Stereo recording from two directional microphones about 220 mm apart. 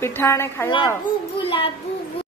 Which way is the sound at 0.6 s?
20° left (ahead or behind).